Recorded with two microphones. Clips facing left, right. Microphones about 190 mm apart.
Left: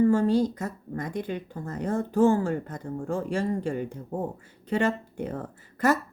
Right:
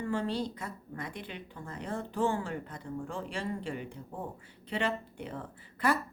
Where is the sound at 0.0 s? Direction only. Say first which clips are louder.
Left 11 dB; 45° left (ahead or behind).